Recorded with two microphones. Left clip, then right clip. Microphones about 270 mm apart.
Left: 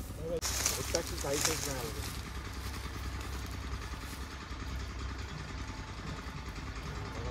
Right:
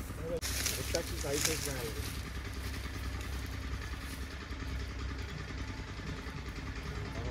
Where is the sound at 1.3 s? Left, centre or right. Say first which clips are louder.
Even; left.